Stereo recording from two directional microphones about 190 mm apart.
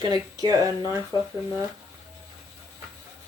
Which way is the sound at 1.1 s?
20° left (ahead or behind).